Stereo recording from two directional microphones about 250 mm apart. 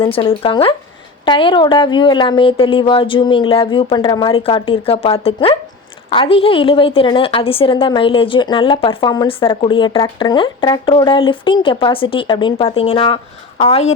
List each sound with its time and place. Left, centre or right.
0.0 s a woman's voice: centre